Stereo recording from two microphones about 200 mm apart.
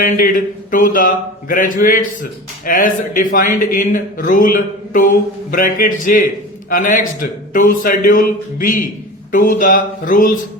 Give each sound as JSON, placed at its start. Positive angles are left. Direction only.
{"t": 0.0, "sound": "speech", "side_deg": 45}